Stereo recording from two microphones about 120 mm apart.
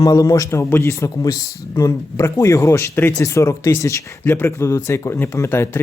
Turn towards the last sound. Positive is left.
turn(degrees=20)  # may be behind; listen again after turning